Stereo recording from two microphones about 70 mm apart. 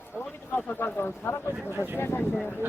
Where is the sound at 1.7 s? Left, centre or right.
Right.